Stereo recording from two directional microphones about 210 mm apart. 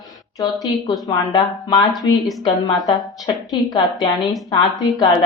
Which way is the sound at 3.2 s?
20° left (ahead or behind).